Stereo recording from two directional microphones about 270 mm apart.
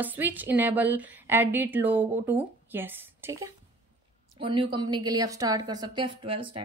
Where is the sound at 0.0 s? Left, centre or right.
Centre.